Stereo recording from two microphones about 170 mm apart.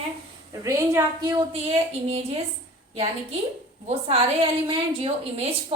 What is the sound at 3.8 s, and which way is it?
A woman's voice, 35° right (ahead or behind).